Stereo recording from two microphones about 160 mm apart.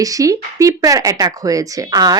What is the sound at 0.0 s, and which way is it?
Speech, 20° right (ahead or behind).